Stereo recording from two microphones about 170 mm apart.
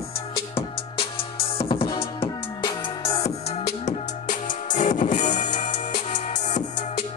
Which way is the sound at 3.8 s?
50° left (ahead or behind).